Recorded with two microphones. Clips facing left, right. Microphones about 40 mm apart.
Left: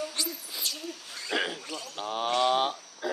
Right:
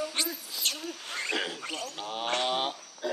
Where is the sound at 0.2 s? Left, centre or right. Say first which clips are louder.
Right 3 dB; right.